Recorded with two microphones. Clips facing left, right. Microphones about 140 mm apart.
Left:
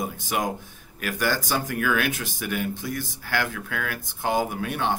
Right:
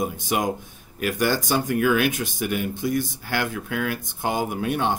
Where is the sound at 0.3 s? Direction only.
20° right (ahead or behind).